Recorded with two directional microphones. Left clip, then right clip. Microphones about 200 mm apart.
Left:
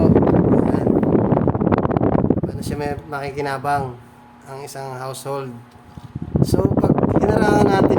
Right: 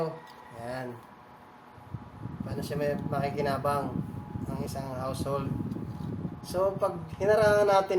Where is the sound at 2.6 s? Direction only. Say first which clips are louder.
Left 5 dB; 50° left (ahead or behind).